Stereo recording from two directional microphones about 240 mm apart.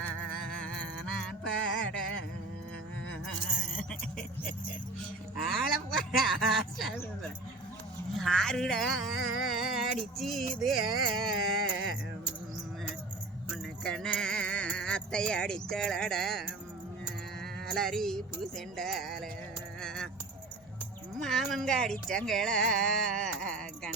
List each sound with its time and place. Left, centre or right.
0.6 s music: centre
1.5 s music: left
5.5 s a sound: centre
8.2 s a sound: centre
13.5 s music: centre
17.7 s speech: centre
19.8 s keys jangling: centre
21.2 s speech: centre